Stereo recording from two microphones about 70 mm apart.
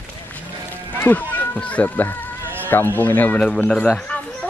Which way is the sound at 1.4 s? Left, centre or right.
Left.